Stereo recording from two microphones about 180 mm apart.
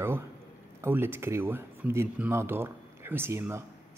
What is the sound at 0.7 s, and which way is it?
Speech, 10° right (ahead or behind).